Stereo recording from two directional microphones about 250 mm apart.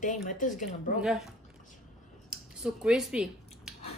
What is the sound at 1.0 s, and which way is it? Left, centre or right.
Speech, centre.